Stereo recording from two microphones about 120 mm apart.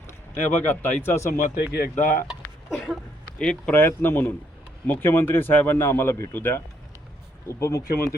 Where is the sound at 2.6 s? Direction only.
5° left (ahead or behind).